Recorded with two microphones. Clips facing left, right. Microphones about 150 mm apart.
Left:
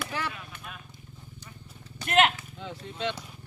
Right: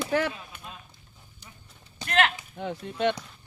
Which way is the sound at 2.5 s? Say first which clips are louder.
Right 6 dB; 55° right (ahead or behind).